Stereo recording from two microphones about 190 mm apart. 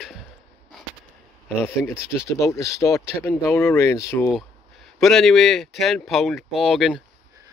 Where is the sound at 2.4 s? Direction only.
15° left (ahead or behind).